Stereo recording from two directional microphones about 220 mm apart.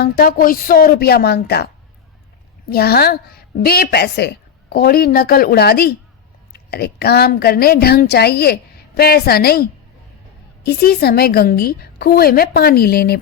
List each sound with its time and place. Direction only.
0.0 s a woman's voice: 45° left (ahead or behind)
2.6 s a woman's voice: 45° left (ahead or behind)